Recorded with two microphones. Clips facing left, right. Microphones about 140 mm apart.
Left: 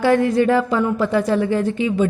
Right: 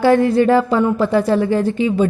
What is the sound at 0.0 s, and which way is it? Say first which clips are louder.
A woman's voice: right 3 dB; 35° right (ahead or behind).